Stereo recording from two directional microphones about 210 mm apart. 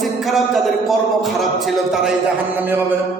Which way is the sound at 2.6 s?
10° right (ahead or behind).